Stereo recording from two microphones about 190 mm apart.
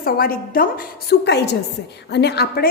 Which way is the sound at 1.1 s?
60° left (ahead or behind).